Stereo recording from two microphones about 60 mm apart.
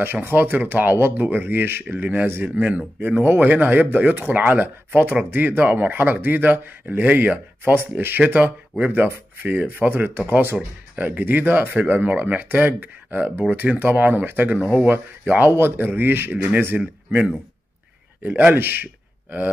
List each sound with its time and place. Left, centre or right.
0.0 s speech: right
18.2 s speech: right